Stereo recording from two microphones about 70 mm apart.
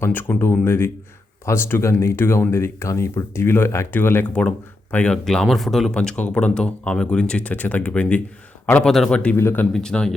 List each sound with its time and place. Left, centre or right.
0.0 s speech: left
4.4 s speech: centre
5.1 s speech: centre
5.9 s speech: centre
9.3 s speech: left
9.7 s speech: centre